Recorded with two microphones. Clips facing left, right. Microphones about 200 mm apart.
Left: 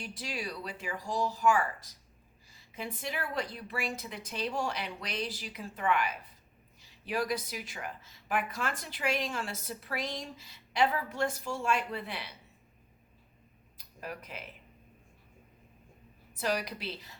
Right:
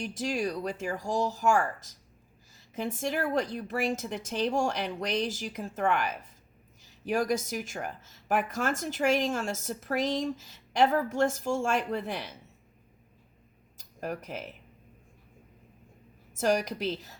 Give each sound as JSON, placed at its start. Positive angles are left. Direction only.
{"t": 0.0, "sound": "a woman's voice", "side_deg": -45}
{"t": 13.7, "sound": "a sound", "side_deg": -45}
{"t": 16.3, "sound": "a woman's voice", "side_deg": -45}